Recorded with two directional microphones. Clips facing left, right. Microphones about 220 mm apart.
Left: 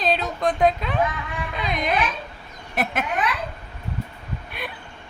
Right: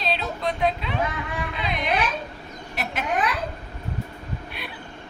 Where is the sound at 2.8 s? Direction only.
55° left (ahead or behind).